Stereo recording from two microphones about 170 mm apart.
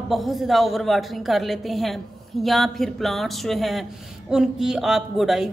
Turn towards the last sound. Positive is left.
turn(degrees=0)  # may be behind; listen again after turning